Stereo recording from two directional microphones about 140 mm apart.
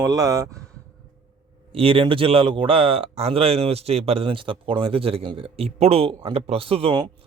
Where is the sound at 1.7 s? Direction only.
40° right (ahead or behind).